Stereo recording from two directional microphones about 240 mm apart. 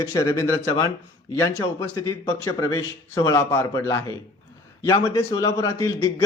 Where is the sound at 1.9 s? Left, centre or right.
Centre.